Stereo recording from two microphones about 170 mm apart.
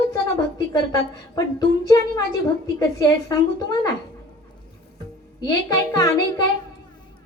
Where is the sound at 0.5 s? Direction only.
20° left (ahead or behind).